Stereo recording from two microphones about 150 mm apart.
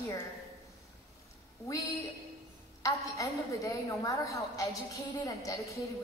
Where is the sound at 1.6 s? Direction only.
20° left (ahead or behind).